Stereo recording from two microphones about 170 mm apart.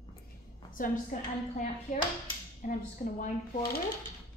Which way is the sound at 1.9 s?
45° left (ahead or behind).